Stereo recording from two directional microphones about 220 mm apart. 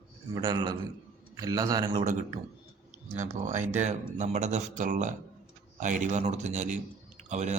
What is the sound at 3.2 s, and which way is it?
Speech, 35° right (ahead or behind).